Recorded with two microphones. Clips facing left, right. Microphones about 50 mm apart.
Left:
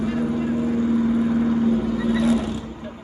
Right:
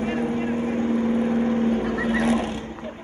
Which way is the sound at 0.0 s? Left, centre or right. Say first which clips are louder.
Left 1 dB; right.